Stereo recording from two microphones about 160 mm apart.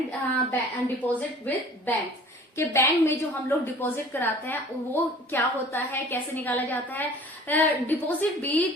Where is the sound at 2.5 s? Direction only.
15° left (ahead or behind).